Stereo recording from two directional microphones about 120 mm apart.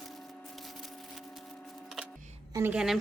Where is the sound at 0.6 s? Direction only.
Centre (ahead or behind).